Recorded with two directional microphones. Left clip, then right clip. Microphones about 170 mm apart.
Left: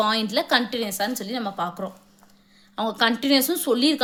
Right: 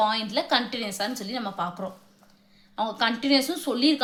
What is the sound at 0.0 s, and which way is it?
A woman's voice, 50° left (ahead or behind).